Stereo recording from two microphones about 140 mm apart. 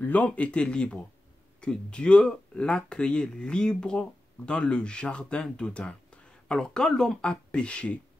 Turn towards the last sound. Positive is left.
turn(degrees=10)  # may be behind; listen again after turning